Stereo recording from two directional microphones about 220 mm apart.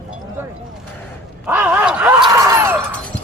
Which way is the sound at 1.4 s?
5° right (ahead or behind).